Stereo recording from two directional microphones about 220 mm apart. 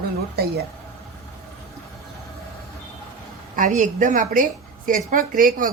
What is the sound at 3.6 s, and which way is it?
A woman's voice, 35° right (ahead or behind).